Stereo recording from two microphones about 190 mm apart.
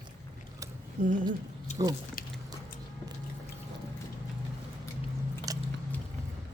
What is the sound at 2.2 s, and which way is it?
Squish, 50° left (ahead or behind).